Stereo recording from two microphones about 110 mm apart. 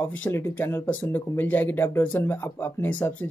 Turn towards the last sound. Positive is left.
turn(degrees=20)  # may be behind; listen again after turning